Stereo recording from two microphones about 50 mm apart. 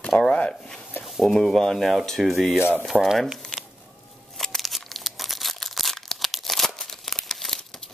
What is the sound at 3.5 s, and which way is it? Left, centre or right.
Chicken, centre.